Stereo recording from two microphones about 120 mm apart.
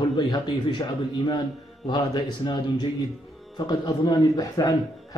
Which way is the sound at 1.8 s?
40° left (ahead or behind).